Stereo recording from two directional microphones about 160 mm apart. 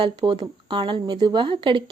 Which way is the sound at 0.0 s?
30° right (ahead or behind).